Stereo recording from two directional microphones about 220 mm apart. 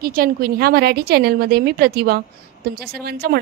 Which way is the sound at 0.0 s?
40° right (ahead or behind).